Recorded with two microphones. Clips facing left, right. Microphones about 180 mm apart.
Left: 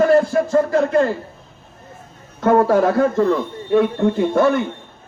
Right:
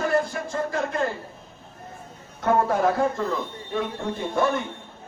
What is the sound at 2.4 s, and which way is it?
Speech, 75° left (ahead or behind).